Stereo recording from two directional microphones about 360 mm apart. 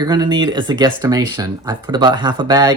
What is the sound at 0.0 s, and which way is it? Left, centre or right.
Speech, centre.